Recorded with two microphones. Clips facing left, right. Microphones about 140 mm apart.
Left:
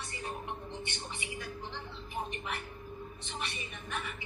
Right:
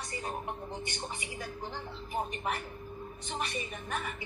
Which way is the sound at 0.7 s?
40° right (ahead or behind).